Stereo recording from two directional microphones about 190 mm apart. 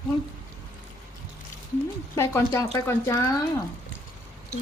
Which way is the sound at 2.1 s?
15° left (ahead or behind).